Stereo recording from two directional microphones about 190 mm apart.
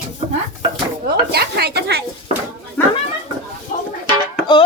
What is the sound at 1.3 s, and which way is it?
Speech, 55° right (ahead or behind).